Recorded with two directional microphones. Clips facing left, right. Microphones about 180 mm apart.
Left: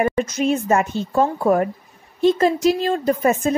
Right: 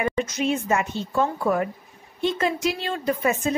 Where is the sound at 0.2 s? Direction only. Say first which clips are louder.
Left 4 dB; 45° left (ahead or behind).